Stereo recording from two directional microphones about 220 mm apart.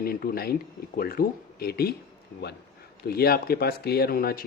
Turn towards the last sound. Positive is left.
turn(degrees=45)  # may be behind; listen again after turning